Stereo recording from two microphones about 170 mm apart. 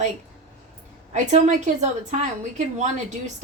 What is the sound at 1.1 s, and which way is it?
A woman's voice, 45° right (ahead or behind).